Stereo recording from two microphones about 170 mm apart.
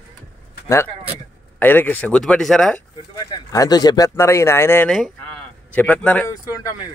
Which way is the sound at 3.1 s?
20° left (ahead or behind).